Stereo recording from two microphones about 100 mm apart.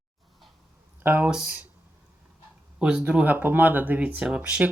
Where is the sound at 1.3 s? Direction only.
10° right (ahead or behind).